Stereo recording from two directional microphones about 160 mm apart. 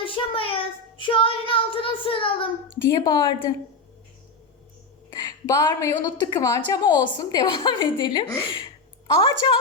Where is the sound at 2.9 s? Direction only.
25° left (ahead or behind).